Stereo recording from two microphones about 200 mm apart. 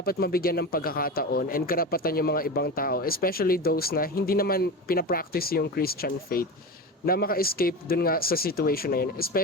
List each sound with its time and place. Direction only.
0.0 s a man's voice: 50° left (ahead or behind)